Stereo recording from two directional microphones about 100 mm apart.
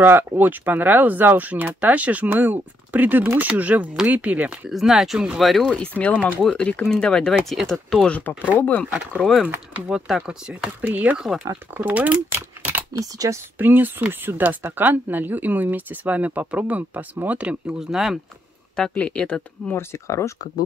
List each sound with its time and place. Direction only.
0.0 s speech: 20° right (ahead or behind)
4.6 s speech: centre (ahead or behind)
8.5 s speech: 20° left (ahead or behind)
9.1 s speech: 5° left (ahead or behind); by 13.4 s 35° right (ahead or behind)
13.6 s speech: 20° right (ahead or behind); by 18.2 s 5° right (ahead or behind)
18.8 s speech: 10° left (ahead or behind)
19.7 s speech: 25° left (ahead or behind)